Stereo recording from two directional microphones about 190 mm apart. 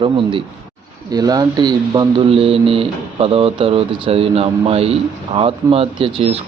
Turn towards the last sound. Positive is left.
turn(degrees=-30)  # may be behind; listen again after turning